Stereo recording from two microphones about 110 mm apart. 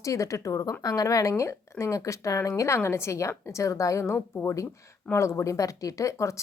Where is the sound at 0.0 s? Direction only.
30° left (ahead or behind).